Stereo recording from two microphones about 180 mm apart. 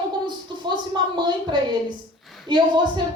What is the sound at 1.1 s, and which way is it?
Speech, 25° right (ahead or behind).